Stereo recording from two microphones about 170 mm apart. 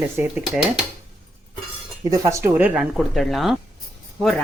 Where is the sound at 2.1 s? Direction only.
15° right (ahead or behind).